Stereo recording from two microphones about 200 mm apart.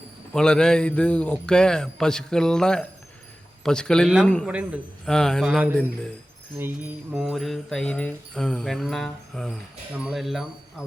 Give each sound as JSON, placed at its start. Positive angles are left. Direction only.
{"t": 0.3, "sound": "jingle bell", "side_deg": 5}
{"t": 6.6, "sound": "jingle bell", "side_deg": -10}